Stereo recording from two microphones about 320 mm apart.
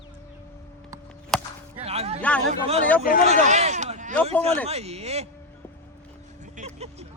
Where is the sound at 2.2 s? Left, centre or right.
Centre.